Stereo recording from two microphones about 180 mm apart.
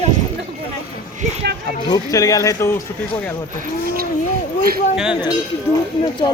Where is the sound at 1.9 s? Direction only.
20° left (ahead or behind).